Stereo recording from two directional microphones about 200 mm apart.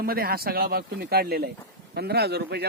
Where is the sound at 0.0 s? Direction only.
50° right (ahead or behind).